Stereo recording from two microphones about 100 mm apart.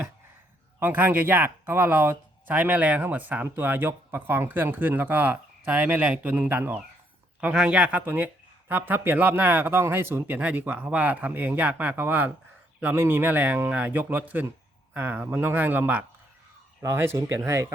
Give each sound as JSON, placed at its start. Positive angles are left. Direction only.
{"t": 0.8, "sound": "speech", "side_deg": -20}